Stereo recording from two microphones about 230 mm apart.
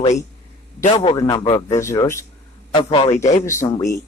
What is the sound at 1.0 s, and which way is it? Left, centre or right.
A man's voice, centre.